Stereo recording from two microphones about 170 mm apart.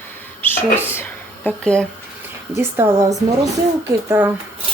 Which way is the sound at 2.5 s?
15° right (ahead or behind).